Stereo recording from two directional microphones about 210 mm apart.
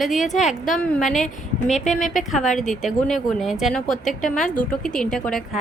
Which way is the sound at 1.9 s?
40° left (ahead or behind).